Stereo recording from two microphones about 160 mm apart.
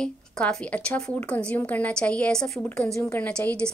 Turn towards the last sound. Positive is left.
turn(degrees=5)  # may be behind; listen again after turning